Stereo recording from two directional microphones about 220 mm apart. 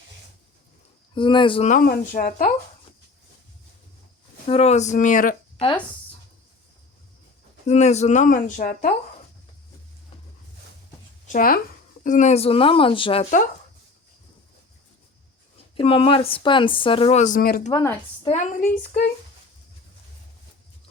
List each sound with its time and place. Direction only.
1.1 s speech: 20° left (ahead or behind); by 2.5 s 40° left (ahead or behind)
4.4 s speech: 25° left (ahead or behind)
7.7 s speech: 30° left (ahead or behind)
11.3 s a woman's voice: 40° left (ahead or behind); by 13.2 s 25° left (ahead or behind)
15.7 s a woman's voice: 25° left (ahead or behind); by 17.7 s 40° left (ahead or behind)
17.7 s a woman's voice: 20° left (ahead or behind)
18.3 s speech: 35° left (ahead or behind)